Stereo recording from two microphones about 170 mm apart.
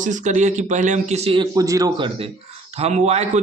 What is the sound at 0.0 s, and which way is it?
Speech, 45° right (ahead or behind).